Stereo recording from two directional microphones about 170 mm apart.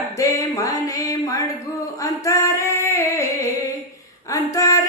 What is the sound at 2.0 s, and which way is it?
Female singing, 15° left (ahead or behind).